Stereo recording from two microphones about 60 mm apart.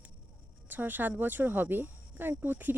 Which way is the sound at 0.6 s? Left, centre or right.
Right.